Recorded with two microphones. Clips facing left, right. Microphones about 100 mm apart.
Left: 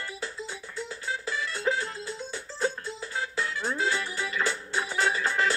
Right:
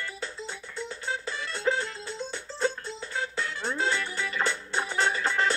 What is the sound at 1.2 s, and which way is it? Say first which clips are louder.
Music: even; 30° right (ahead or behind).